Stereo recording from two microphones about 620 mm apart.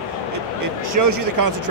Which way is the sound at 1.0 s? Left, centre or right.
Right.